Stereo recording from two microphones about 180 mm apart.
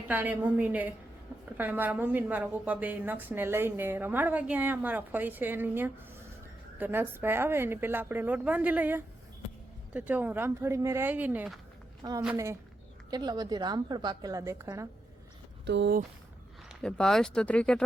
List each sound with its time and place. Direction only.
0.1 s a woman's voice: 10° right (ahead or behind)
12.0 s a woman's voice: 20° right (ahead or behind)
15.6 s speech: 75° right (ahead or behind)
16.8 s speech: 5° left (ahead or behind)